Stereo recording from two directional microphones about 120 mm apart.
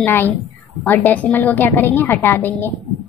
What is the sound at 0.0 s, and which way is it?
A woman's voice, 15° left (ahead or behind).